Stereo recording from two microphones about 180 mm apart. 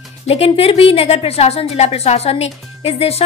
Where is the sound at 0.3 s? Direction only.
35° left (ahead or behind).